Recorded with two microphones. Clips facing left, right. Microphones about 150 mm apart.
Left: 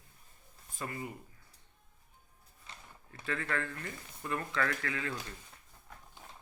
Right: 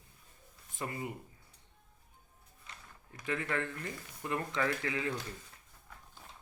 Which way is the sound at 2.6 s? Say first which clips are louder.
Left 1 dB; 30° left (ahead or behind).